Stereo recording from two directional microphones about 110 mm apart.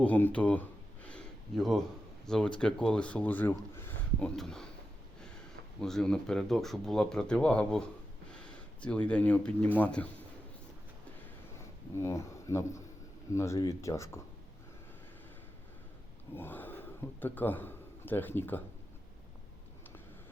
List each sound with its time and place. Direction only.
0.0 s a sound: 15° left (ahead or behind)
1.5 s speech: centre (ahead or behind); by 4.3 s 20° left (ahead or behind)
4.4 s speech: 5° left (ahead or behind)
5.8 s speech: 5° left (ahead or behind)
11.9 s speech: 25° left (ahead or behind)
16.3 s a man's voice: 20° left (ahead or behind)